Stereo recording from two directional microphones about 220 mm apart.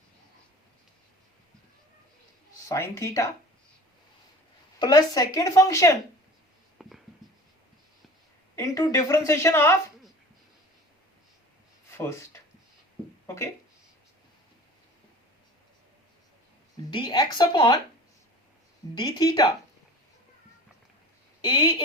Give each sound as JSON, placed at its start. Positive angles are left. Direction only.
{"t": 2.6, "sound": "speech", "side_deg": 15}
{"t": 4.8, "sound": "speech", "side_deg": 20}
{"t": 6.8, "sound": "a sound", "side_deg": 0}
{"t": 8.5, "sound": "speech", "side_deg": 15}
{"t": 11.9, "sound": "speech", "side_deg": 10}
{"t": 16.9, "sound": "a woman's voice", "side_deg": 20}
{"t": 18.9, "sound": "a woman's voice", "side_deg": 20}
{"t": 21.4, "sound": "a woman's voice", "side_deg": 20}